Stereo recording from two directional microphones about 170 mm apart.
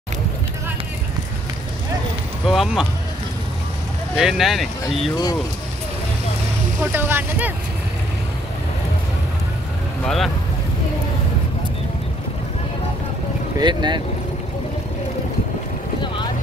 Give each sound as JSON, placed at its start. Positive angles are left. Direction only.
{"t": 2.4, "sound": "speech", "side_deg": 0}
{"t": 4.2, "sound": "speech", "side_deg": 0}
{"t": 5.1, "sound": "speech", "side_deg": 20}
{"t": 6.8, "sound": "speech", "side_deg": -10}
{"t": 10.0, "sound": "speech", "side_deg": 0}
{"t": 13.6, "sound": "speech", "side_deg": -25}